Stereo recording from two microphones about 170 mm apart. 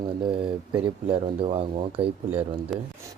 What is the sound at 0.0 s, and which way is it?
Speech, 30° right (ahead or behind).